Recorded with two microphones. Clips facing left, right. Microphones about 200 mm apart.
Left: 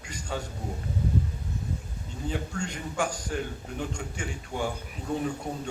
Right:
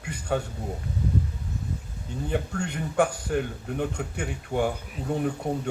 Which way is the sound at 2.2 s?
60° right (ahead or behind).